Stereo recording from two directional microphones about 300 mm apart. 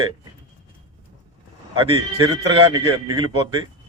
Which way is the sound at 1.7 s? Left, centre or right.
Centre.